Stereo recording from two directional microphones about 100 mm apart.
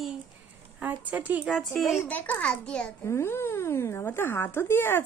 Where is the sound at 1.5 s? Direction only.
Centre (ahead or behind).